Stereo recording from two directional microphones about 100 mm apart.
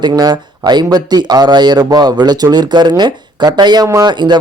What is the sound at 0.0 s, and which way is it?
Speech, 45° right (ahead or behind).